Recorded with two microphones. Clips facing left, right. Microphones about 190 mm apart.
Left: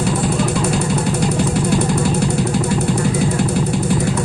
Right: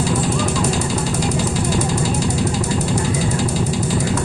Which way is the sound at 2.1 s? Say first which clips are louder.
Left 2 dB; 60° left (ahead or behind).